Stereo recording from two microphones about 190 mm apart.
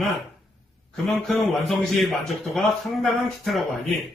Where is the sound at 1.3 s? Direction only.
Centre (ahead or behind).